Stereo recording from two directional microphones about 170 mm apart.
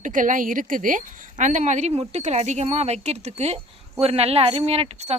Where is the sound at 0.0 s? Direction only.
50° right (ahead or behind).